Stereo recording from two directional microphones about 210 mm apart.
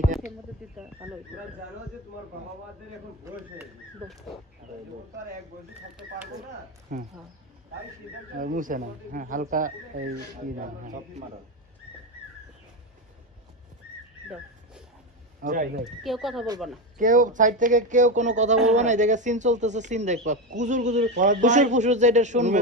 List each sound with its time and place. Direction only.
0.7 s speech: 5° right (ahead or behind)
6.9 s speech: 40° right (ahead or behind)
8.4 s speech: 40° right (ahead or behind)
15.4 s speech: 40° right (ahead or behind)
16.0 s speech: centre (ahead or behind)
17.0 s speech: 40° right (ahead or behind)